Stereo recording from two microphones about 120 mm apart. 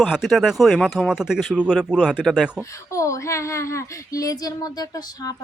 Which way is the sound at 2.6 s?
25° left (ahead or behind).